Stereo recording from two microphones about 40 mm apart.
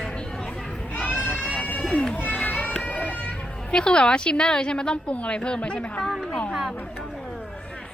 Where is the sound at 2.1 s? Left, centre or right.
Left.